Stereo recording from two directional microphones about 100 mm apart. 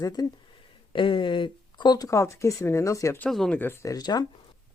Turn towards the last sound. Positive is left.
turn(degrees=40)  # may be behind; listen again after turning